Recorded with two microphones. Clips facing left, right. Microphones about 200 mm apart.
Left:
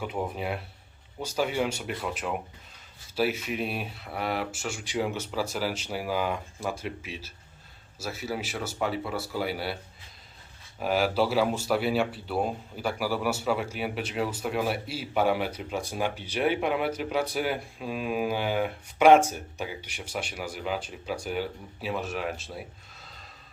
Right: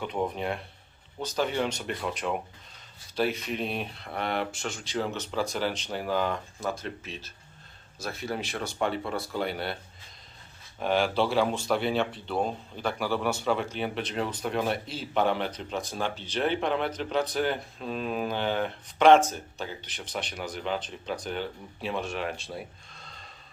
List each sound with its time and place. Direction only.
0.0 s speech: 5° left (ahead or behind)
10.8 s speech: 5° left (ahead or behind)